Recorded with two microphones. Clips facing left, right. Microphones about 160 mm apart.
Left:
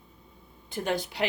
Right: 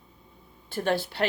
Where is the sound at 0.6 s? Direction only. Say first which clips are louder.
Right 3 dB; 15° left (ahead or behind).